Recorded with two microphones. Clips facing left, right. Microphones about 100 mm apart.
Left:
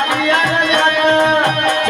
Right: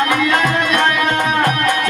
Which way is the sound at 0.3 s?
30° left (ahead or behind).